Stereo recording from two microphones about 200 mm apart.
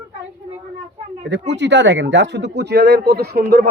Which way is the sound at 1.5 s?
60° right (ahead or behind).